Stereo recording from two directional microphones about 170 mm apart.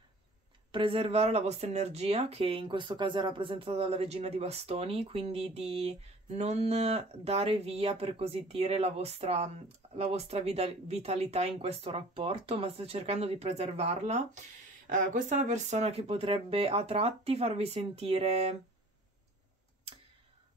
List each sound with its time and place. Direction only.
0.7 s speech: 30° right (ahead or behind)